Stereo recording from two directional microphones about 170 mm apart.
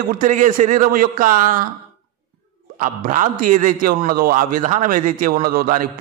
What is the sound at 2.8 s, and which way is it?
A man's voice, 50° right (ahead or behind).